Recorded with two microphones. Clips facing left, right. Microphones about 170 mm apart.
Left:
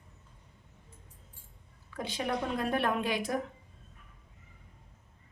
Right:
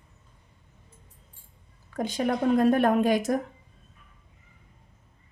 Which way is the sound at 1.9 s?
45° right (ahead or behind).